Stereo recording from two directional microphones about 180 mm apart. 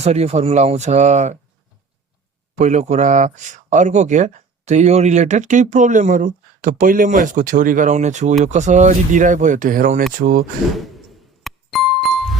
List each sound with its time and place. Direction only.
0.0 s speech: 35° right (ahead or behind)
2.6 s speech: 40° right (ahead or behind)
11.4 s music: centre (ahead or behind)